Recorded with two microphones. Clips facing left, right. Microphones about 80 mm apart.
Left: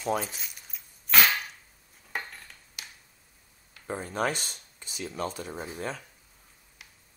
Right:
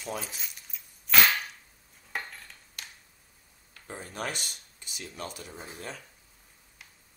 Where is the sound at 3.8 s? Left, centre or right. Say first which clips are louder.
Left 7 dB; left.